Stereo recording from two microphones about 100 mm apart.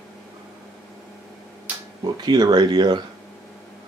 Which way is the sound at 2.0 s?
45° right (ahead or behind).